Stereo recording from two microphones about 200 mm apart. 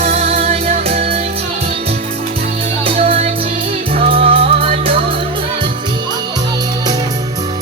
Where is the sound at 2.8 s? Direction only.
30° right (ahead or behind).